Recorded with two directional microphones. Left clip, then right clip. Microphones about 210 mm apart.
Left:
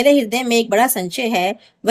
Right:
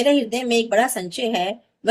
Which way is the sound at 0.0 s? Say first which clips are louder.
Left 4 dB; 50° left (ahead or behind).